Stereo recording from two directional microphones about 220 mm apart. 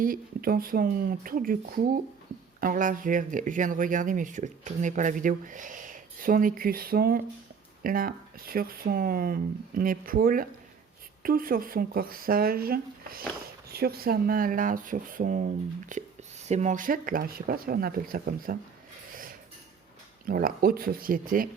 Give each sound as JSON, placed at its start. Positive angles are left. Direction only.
{"t": 0.0, "sound": "speech", "side_deg": -40}
{"t": 19.1, "sound": "a sound", "side_deg": -40}
{"t": 20.2, "sound": "speech", "side_deg": -40}